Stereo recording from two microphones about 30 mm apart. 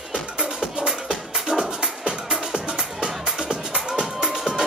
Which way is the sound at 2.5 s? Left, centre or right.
Right.